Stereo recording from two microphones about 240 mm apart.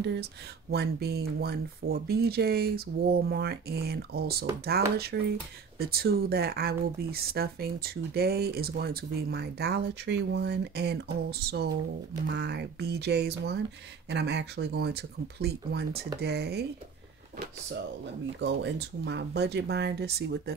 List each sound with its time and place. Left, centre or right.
0.0 s speech: right
18.4 s speech: right